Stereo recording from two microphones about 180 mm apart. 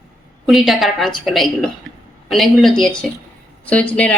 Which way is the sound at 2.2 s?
Centre (ahead or behind).